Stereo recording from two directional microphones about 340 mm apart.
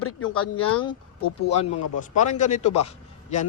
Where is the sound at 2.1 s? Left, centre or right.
Left.